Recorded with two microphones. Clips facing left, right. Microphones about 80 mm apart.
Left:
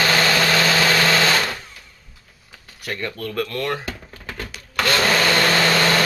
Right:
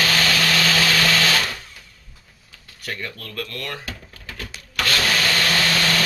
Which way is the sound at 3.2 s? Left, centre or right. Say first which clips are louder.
Left 7 dB; left.